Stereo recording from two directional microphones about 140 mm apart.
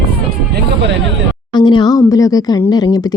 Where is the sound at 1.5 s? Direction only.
30° left (ahead or behind).